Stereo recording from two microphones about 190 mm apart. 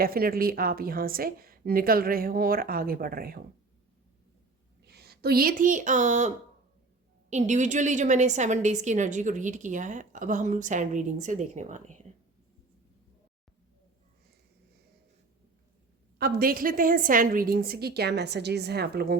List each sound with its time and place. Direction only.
0.0 s a woman's voice: 50° right (ahead or behind)
4.9 s a woman's voice: 55° right (ahead or behind); by 12.0 s 40° right (ahead or behind)
16.1 s a woman's voice: 50° right (ahead or behind)